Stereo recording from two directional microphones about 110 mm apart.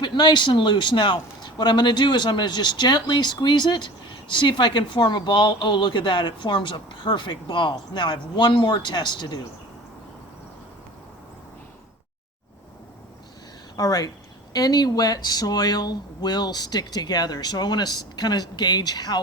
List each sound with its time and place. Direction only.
0.0 s a man's voice: 40° left (ahead or behind)
13.7 s speech: 35° left (ahead or behind)